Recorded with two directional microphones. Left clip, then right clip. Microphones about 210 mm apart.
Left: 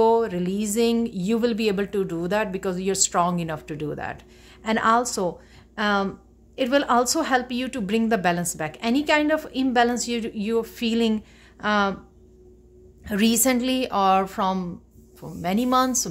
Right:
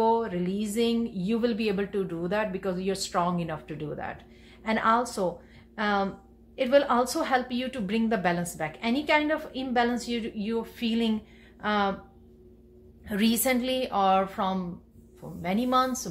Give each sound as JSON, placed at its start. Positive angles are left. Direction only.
{"t": 0.0, "sound": "a woman's voice", "side_deg": 45}
{"t": 13.0, "sound": "a woman's voice", "side_deg": 45}